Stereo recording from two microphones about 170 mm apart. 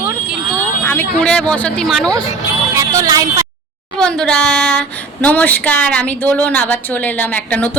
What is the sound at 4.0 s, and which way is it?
Speech, 5° left (ahead or behind).